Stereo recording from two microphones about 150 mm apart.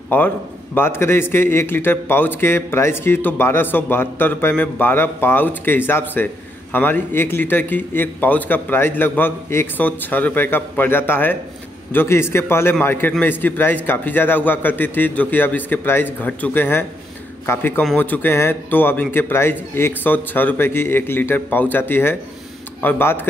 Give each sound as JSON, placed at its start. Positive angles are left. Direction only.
{"t": 0.1, "sound": "a man's voice", "side_deg": 15}